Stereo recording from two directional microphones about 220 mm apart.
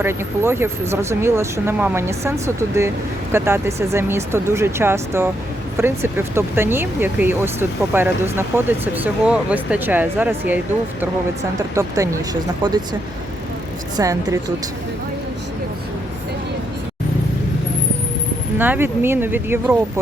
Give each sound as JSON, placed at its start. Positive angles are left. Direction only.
{"t": 0.0, "sound": "speech", "side_deg": -10}
{"t": 11.7, "sound": "speech", "side_deg": -15}
{"t": 18.5, "sound": "speech", "side_deg": -10}